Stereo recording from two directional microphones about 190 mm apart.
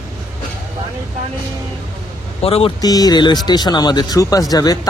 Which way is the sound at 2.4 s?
30° left (ahead or behind).